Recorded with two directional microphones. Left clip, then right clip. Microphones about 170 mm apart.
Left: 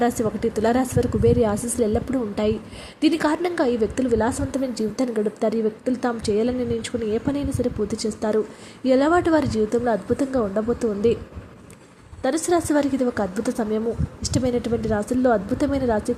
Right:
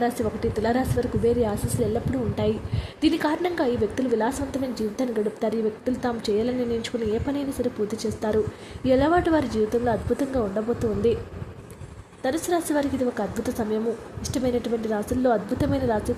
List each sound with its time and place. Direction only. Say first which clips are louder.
0.0 s a woman's voice: left 3 dB; 25° left (ahead or behind)
12.2 s a woman's voice: left 4 dB; 20° left (ahead or behind)